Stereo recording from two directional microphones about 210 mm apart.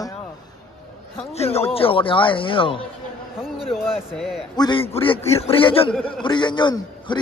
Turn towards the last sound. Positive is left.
turn(degrees=20)  # may be behind; listen again after turning